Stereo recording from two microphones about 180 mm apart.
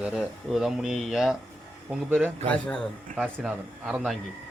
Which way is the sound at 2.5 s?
5° left (ahead or behind).